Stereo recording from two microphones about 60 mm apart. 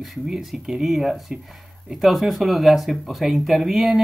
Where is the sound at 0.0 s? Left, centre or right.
Centre.